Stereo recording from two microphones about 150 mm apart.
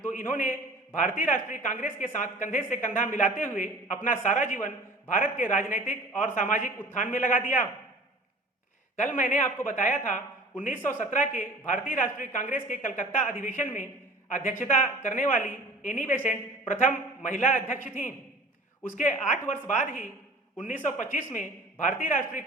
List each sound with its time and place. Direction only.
0.1 s a man's voice: 60° left (ahead or behind)
9.1 s a woman's voice: 55° left (ahead or behind)